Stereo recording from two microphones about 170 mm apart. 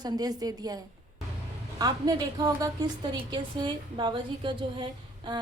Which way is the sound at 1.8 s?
25° right (ahead or behind).